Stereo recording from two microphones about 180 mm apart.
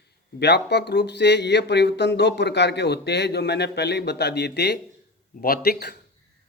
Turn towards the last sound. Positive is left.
turn(degrees=60)  # may be behind; listen again after turning